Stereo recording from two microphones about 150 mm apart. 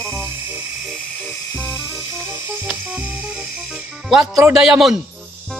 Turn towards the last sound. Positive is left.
turn(degrees=-5)  # may be behind; listen again after turning